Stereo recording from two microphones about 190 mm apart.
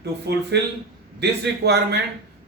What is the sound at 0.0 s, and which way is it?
Speech, 60° right (ahead or behind).